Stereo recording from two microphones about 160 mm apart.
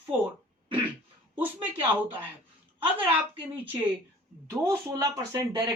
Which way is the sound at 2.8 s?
10° right (ahead or behind).